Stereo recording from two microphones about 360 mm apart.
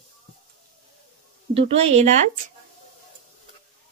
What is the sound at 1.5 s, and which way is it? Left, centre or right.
Speech, centre.